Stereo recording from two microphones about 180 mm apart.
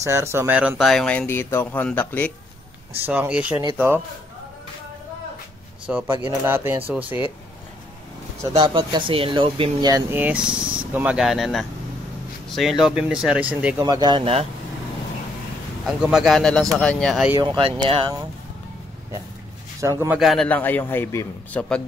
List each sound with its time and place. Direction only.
0.0 s speech: 15° right (ahead or behind); by 2.3 s 10° left (ahead or behind)
3.1 s speech: 5° right (ahead or behind)
5.9 s speech: 10° right (ahead or behind)
8.4 s speech: 25° right (ahead or behind)
10.1 s speech: 10° right (ahead or behind)
13.7 s speech: 20° right (ahead or behind)
15.8 s speech: centre (ahead or behind)
17.4 s speech: 30° right (ahead or behind)
19.8 s speech: 15° right (ahead or behind)
20.2 s a man's voice: centre (ahead or behind)